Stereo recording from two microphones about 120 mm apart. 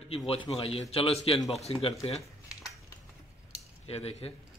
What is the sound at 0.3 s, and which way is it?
A man's voice, 50° left (ahead or behind).